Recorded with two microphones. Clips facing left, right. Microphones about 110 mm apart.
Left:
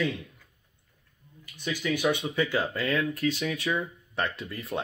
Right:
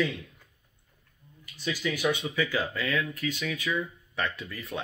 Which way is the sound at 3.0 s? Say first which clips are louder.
Left 4 dB; 30° left (ahead or behind).